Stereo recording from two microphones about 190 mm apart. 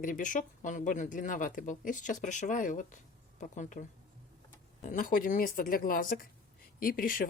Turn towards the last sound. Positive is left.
turn(degrees=45)  # may be behind; listen again after turning